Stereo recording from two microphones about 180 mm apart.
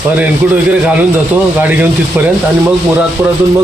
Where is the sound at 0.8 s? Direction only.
5° right (ahead or behind).